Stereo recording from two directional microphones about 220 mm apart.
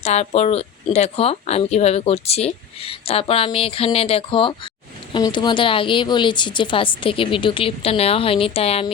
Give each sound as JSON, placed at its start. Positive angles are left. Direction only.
{"t": 0.0, "sound": "speech", "side_deg": 30}